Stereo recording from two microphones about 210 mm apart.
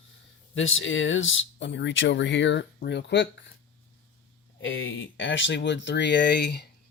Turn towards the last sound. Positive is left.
turn(degrees=55)  # may be behind; listen again after turning